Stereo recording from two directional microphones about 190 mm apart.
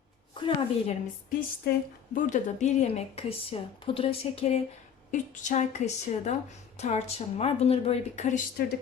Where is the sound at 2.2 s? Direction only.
40° left (ahead or behind).